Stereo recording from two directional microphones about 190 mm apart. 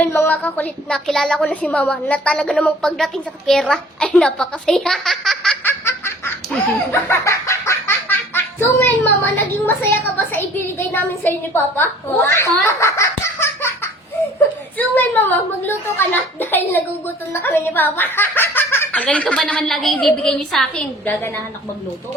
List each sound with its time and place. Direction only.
0.0 s a woman's voice: 10° left (ahead or behind)
5.8 s laughter: 15° left (ahead or behind)
7.1 s speech: 15° left (ahead or behind)
12.6 s laughter: 15° left (ahead or behind)
14.8 s speech: 10° left (ahead or behind)